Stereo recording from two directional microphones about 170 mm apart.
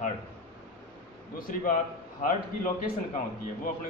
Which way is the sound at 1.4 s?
55° left (ahead or behind).